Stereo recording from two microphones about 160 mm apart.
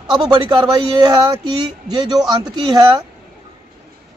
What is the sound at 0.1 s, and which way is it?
Speech, 25° right (ahead or behind).